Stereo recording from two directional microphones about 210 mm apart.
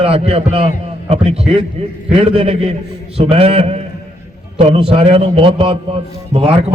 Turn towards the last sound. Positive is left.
turn(degrees=-30)  # may be behind; listen again after turning